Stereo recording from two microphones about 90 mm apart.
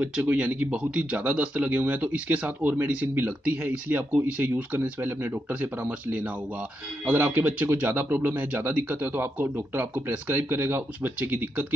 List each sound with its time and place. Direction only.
0.0 s speech: 15° right (ahead or behind)